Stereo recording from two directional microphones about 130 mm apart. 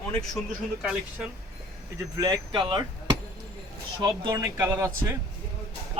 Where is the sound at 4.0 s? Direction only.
30° right (ahead or behind).